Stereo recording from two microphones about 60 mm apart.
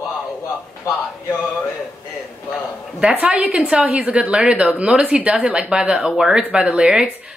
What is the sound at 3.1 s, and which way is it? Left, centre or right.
A woman's voice, right.